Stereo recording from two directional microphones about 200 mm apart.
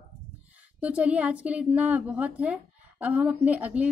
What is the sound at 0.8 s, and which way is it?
A woman's voice, 5° right (ahead or behind).